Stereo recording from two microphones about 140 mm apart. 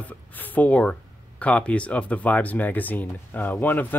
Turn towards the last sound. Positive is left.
turn(degrees=15)  # may be behind; listen again after turning